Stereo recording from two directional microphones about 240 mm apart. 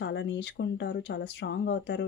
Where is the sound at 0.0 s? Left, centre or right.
Left.